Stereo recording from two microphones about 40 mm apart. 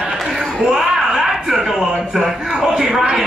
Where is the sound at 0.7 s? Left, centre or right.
Centre.